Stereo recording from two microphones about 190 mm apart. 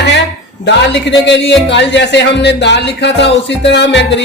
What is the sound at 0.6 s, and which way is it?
A man's voice, 65° left (ahead or behind).